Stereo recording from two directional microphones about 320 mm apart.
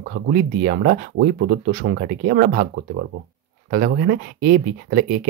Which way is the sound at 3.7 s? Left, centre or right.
Right.